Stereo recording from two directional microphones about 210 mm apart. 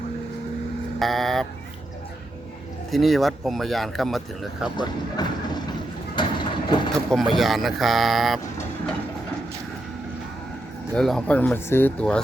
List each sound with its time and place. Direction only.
0.9 s speech: centre (ahead or behind)
2.9 s speech: centre (ahead or behind)
4.8 s speech: 20° left (ahead or behind)
6.1 s vehicle: 20° left (ahead or behind)
6.9 s speech: centre (ahead or behind)
10.9 s speech: centre (ahead or behind)